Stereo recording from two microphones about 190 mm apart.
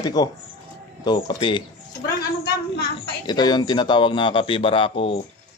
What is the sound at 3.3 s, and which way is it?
Speech, 20° left (ahead or behind).